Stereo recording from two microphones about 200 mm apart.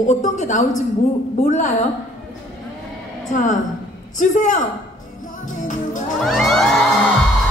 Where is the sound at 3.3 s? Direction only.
40° left (ahead or behind).